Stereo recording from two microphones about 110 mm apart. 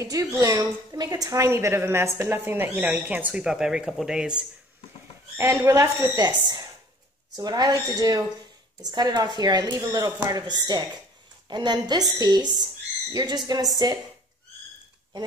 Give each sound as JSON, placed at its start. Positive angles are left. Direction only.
{"t": 0.0, "sound": "a woman's voice", "side_deg": -30}
{"t": 5.4, "sound": "a woman's voice", "side_deg": -20}
{"t": 6.0, "sound": "a woman's voice", "side_deg": -40}